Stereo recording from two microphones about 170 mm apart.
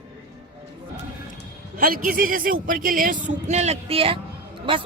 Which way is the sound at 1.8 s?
55° right (ahead or behind).